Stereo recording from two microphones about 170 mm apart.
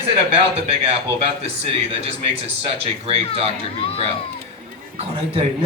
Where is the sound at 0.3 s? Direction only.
35° right (ahead or behind).